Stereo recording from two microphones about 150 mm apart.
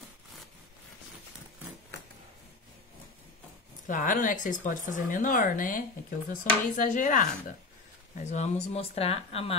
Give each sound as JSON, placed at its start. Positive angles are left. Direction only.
{"t": 3.8, "sound": "speech", "side_deg": 60}